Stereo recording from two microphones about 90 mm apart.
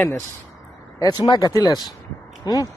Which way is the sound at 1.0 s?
50° left (ahead or behind).